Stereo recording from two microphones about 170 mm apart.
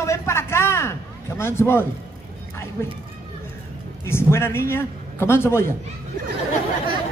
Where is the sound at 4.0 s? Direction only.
15° left (ahead or behind).